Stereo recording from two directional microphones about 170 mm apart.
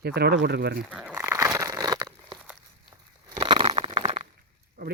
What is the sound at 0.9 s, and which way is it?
Crumpling, 5° right (ahead or behind).